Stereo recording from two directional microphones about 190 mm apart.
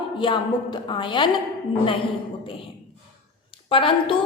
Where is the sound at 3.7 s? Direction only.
25° left (ahead or behind).